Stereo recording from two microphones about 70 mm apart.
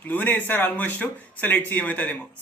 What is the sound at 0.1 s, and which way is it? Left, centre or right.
Speech, left.